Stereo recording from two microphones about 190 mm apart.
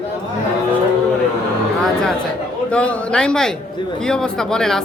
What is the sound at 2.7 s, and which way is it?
A man's voice, 5° left (ahead or behind).